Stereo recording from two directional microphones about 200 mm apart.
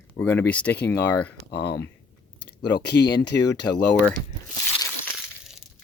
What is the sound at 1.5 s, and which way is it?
Speech, 55° left (ahead or behind).